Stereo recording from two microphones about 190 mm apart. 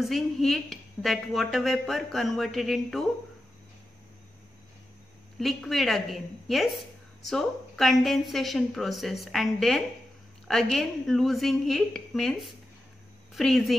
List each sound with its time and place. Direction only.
0.0 s a woman's voice: centre (ahead or behind)
5.4 s a woman's voice: centre (ahead or behind)